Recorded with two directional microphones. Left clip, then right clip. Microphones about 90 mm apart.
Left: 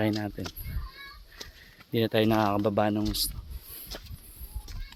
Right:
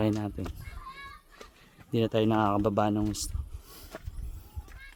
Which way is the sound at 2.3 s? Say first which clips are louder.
Left 1 dB; centre (ahead or behind).